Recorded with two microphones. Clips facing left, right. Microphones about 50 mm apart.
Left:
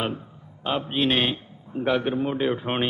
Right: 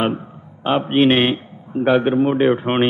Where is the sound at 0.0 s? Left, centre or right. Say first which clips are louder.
Right 8 dB; right.